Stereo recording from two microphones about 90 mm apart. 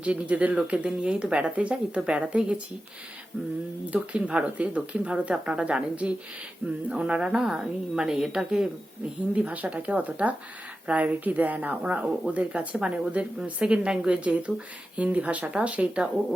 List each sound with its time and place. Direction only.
0.0 s speech: 15° right (ahead or behind)
3.8 s speech: 15° right (ahead or behind)